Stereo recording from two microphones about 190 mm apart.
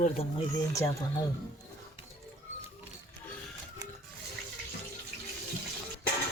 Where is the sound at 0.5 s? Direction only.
15° left (ahead or behind).